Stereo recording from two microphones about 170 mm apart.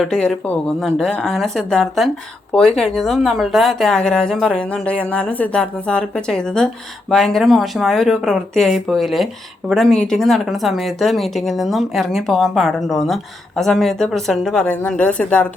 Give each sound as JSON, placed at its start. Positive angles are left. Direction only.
{"t": 0.0, "sound": "speech", "side_deg": 5}